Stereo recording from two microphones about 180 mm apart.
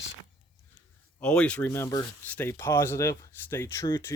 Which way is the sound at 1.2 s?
5° left (ahead or behind).